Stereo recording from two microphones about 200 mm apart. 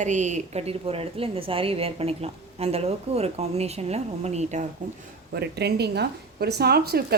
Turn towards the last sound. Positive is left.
turn(degrees=-50)  # may be behind; listen again after turning